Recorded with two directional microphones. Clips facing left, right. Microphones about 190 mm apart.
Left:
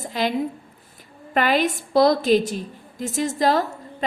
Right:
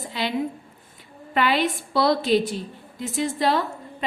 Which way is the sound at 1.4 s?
45° left (ahead or behind).